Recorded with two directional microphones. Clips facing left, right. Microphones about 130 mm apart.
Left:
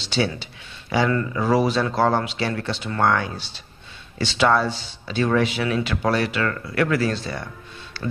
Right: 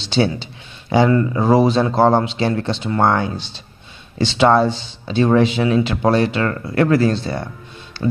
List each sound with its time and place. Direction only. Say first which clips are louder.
0.0 s speech: right 6 dB; 25° right (ahead or behind)